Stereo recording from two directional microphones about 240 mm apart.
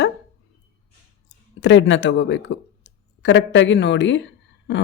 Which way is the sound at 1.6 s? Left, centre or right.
Left.